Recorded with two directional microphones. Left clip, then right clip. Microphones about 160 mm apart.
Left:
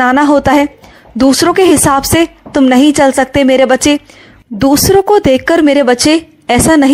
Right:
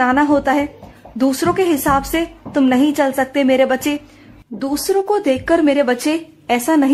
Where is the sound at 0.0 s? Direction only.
40° left (ahead or behind).